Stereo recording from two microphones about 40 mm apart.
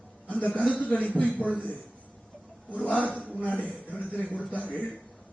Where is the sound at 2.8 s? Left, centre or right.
Left.